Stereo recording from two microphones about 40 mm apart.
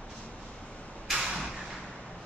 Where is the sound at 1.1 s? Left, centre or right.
Centre.